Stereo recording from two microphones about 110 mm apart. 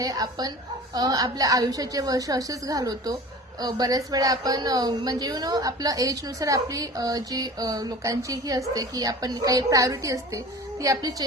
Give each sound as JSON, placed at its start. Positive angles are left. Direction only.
{"t": 0.0, "sound": "a woman's voice", "side_deg": -35}